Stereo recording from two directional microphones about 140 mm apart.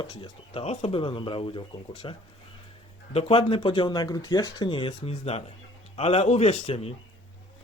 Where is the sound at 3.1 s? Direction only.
40° left (ahead or behind).